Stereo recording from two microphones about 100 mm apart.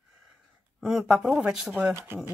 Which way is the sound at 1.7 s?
20° right (ahead or behind).